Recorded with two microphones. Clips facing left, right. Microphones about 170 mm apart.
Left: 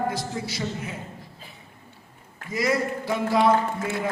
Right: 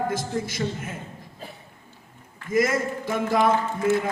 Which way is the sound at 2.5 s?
50° right (ahead or behind).